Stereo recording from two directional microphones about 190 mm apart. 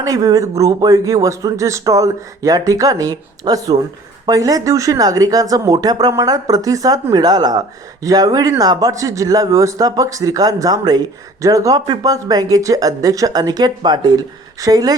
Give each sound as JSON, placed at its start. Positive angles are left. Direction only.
{"t": 0.0, "sound": "a man's voice", "side_deg": -20}